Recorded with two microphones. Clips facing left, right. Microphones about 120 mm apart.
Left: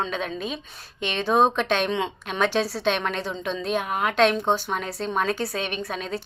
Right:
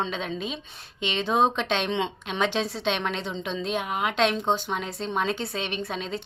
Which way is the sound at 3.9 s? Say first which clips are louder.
Left 2 dB; 45° left (ahead or behind).